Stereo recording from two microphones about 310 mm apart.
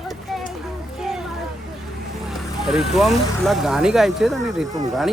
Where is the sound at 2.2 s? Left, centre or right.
Centre.